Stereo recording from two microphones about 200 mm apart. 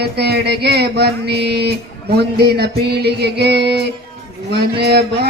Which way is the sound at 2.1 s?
55° right (ahead or behind).